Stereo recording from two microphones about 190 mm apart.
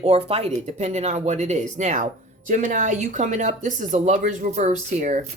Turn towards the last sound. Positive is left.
turn(degrees=-40)  # may be behind; listen again after turning